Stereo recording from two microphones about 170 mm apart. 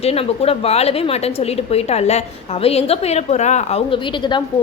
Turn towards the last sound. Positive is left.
turn(degrees=25)  # may be behind; listen again after turning